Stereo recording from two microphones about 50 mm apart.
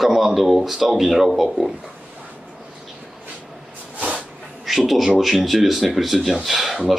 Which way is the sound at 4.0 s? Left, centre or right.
Right.